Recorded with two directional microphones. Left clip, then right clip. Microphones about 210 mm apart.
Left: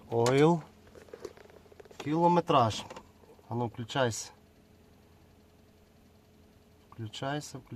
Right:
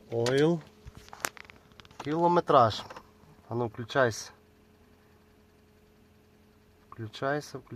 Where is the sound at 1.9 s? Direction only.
5° right (ahead or behind).